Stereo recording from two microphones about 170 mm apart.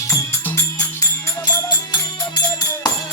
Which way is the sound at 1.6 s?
25° left (ahead or behind).